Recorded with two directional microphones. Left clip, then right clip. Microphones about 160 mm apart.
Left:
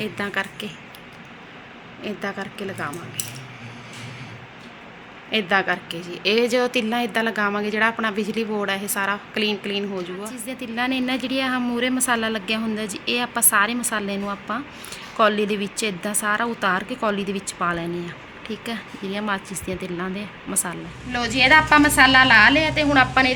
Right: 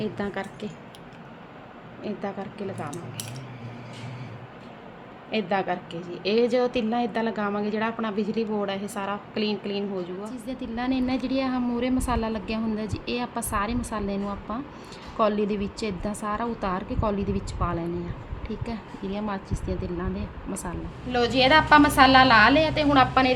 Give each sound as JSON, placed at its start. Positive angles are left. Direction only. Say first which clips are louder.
{"t": 0.0, "sound": "a woman's voice", "louder": "left 5 dB", "side_deg": -15}
{"t": 2.0, "sound": "a woman's voice", "louder": "left 4 dB", "side_deg": 5}
{"t": 5.3, "sound": "a woman's voice", "louder": "left 6 dB", "side_deg": 5}
{"t": 14.3, "sound": "a woman's voice", "louder": "left 5 dB", "side_deg": 30}
{"t": 15.2, "sound": "a woman's voice", "louder": "left 5 dB", "side_deg": 0}